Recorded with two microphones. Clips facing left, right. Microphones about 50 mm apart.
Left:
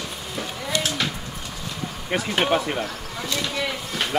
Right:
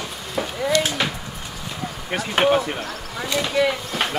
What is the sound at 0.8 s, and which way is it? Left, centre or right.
Speech, right.